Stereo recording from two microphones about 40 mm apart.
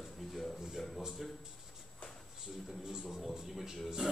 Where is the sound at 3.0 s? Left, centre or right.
Centre.